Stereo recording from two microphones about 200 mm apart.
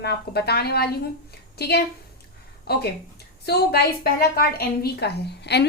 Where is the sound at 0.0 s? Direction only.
55° left (ahead or behind).